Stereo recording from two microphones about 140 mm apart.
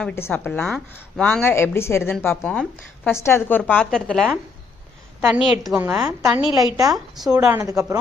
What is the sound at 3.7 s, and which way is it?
Speech, 5° left (ahead or behind).